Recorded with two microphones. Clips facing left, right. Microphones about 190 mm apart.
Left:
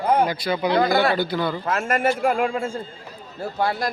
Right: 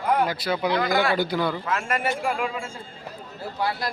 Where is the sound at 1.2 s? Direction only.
10° right (ahead or behind).